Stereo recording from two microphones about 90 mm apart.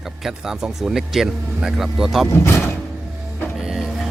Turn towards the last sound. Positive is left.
turn(degrees=-5)  # may be behind; listen again after turning